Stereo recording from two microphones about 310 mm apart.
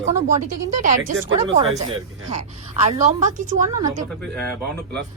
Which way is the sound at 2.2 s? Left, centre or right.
Right.